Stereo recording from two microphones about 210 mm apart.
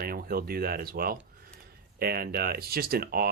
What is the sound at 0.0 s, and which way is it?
Speech, 45° right (ahead or behind).